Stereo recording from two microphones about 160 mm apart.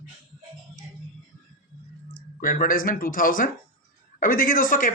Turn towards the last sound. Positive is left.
turn(degrees=60)  # may be behind; listen again after turning